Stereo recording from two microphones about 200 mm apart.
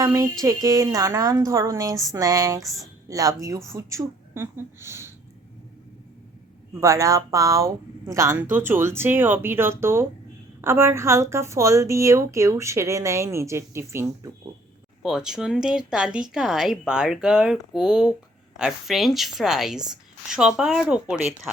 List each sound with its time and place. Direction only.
0.0 s a woman's voice: 15° right (ahead or behind)
6.7 s a woman's voice: 15° right (ahead or behind)